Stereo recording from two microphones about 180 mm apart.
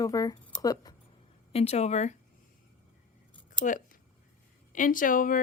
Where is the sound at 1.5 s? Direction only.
35° left (ahead or behind).